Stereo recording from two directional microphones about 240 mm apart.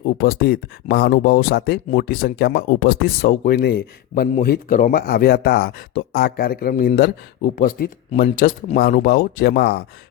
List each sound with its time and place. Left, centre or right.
0.0 s speech: left